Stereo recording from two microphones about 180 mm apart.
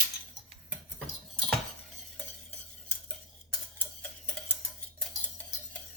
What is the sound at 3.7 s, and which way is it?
Tick-tock, 10° left (ahead or behind).